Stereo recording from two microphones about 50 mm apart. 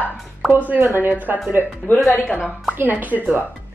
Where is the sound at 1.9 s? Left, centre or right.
Left.